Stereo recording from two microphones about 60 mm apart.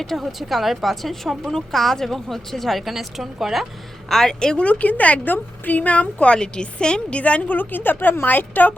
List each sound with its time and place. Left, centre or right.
0.0 s a woman's voice: centre
4.1 s a woman's voice: centre
4.6 s a woman's voice: left
7.4 s a woman's voice: left